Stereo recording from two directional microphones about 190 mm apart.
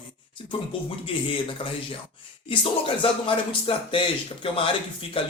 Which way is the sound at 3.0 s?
25° left (ahead or behind).